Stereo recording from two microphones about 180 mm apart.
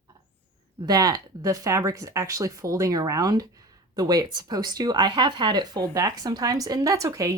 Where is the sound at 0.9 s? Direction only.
20° right (ahead or behind).